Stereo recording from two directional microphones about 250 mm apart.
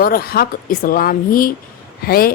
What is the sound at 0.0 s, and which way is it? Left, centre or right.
Speech, left.